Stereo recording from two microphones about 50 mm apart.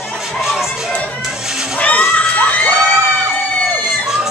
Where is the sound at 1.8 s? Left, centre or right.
Left.